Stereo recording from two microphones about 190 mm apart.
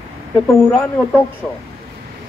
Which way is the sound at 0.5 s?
10° left (ahead or behind).